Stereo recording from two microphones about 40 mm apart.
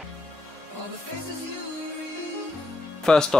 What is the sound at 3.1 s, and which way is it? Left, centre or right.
Speech, centre.